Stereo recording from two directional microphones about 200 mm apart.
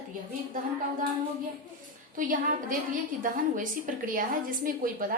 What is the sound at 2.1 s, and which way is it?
A woman's voice, 40° right (ahead or behind).